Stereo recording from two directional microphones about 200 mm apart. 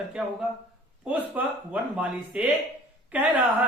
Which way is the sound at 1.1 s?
5° right (ahead or behind).